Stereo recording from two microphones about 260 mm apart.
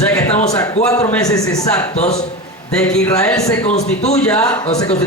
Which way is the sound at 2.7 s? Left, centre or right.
Centre.